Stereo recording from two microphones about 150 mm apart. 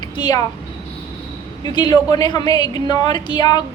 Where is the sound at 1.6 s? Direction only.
30° left (ahead or behind).